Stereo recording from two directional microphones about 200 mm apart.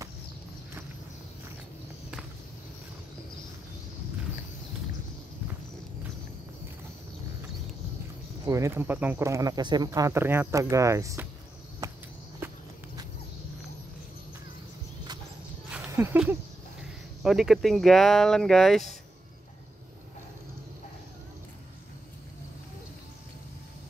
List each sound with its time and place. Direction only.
8.5 s speech: 15° right (ahead or behind)
11.8 s walk: 15° right (ahead or behind)
15.7 s a sound: 10° right (ahead or behind)
16.8 s speech: centre (ahead or behind)